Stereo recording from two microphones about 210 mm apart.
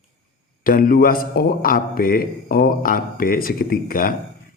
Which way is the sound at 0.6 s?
45° left (ahead or behind).